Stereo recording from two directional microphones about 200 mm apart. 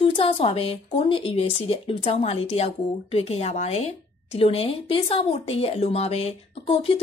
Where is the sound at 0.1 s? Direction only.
30° left (ahead or behind).